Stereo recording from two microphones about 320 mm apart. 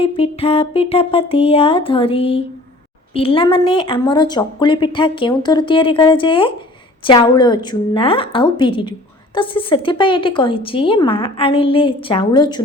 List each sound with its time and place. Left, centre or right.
0.0 s a woman's voice: centre